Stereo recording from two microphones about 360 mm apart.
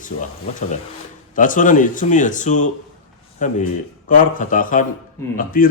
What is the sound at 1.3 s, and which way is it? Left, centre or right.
Speech, left.